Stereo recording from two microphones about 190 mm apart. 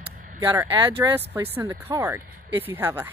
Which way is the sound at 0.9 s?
10° right (ahead or behind).